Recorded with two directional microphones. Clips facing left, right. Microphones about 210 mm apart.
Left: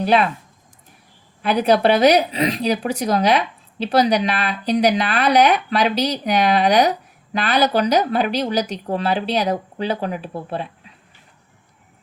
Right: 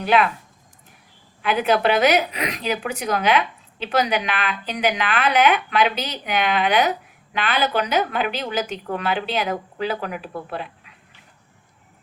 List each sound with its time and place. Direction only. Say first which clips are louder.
0.0 s speech: left 2 dB; 35° left (ahead or behind)
1.4 s speech: left 3 dB; 35° left (ahead or behind)